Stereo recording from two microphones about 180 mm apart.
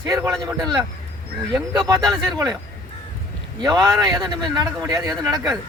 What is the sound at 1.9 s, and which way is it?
Speech, 20° right (ahead or behind).